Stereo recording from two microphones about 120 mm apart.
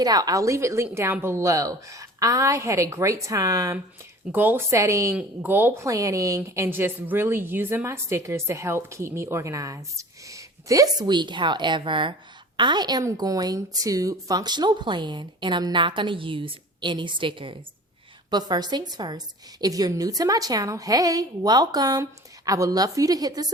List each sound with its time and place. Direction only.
0.0 s a woman's voice: 30° right (ahead or behind)
4.3 s a woman's voice: 15° right (ahead or behind); by 23.5 s 30° right (ahead or behind)